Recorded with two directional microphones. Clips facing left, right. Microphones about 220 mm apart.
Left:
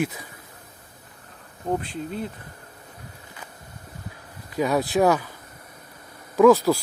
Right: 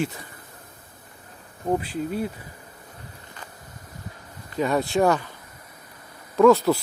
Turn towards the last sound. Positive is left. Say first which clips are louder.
# left 1 dB
turn(degrees=0)  # may be behind; listen again after turning